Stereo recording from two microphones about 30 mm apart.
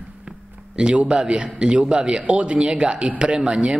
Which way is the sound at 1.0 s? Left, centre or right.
Right.